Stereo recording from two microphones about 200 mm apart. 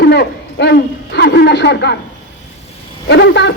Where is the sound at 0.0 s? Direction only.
55° left (ahead or behind).